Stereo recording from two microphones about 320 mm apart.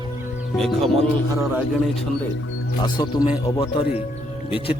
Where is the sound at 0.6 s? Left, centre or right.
Centre.